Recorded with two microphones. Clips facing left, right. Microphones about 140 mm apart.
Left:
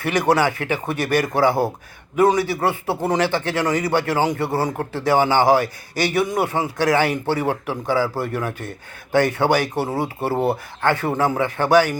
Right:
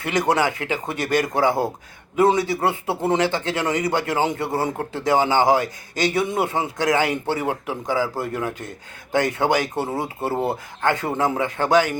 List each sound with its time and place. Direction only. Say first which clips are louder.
0.0 s speech: left 2 dB; 20° right (ahead or behind)
9.9 s speech: left 2 dB; 25° left (ahead or behind)
10.5 s speech: left 2 dB; 20° right (ahead or behind)